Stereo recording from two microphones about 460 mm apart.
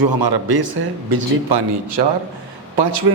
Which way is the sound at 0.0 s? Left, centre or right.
Right.